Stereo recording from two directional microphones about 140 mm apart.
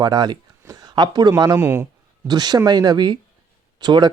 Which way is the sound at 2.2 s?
30° right (ahead or behind).